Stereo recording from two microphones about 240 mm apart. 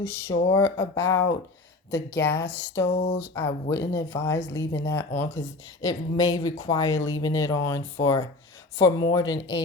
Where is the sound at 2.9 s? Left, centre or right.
Left.